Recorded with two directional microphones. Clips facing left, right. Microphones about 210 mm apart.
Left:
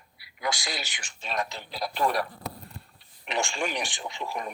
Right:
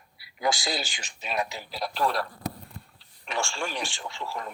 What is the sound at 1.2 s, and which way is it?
Speech, 5° right (ahead or behind).